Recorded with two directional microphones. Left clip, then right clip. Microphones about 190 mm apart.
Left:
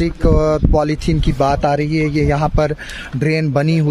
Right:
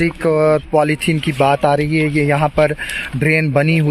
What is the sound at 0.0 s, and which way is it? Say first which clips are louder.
Speech: right 2 dB; centre (ahead or behind).